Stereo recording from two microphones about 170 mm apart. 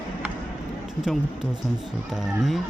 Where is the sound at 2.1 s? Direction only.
5° right (ahead or behind).